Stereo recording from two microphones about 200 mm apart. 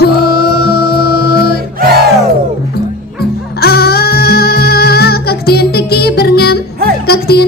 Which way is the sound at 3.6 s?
50° left (ahead or behind).